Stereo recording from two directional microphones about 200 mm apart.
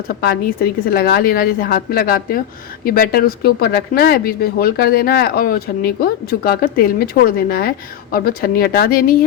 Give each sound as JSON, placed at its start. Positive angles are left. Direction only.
{"t": 0.2, "sound": "speech", "side_deg": 50}